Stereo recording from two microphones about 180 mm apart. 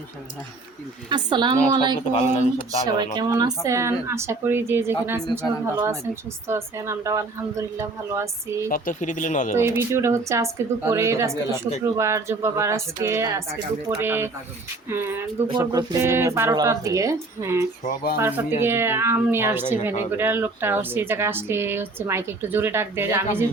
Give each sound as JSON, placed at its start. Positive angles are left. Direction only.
{"t": 1.1, "sound": "a woman's voice", "side_deg": -25}
{"t": 2.0, "sound": "speech", "side_deg": 35}
{"t": 3.2, "sound": "speech", "side_deg": -20}
{"t": 8.7, "sound": "speech", "side_deg": 50}
{"t": 9.6, "sound": "speech", "side_deg": -15}
{"t": 17.8, "sound": "speech", "side_deg": 55}
{"t": 18.2, "sound": "speech", "side_deg": -10}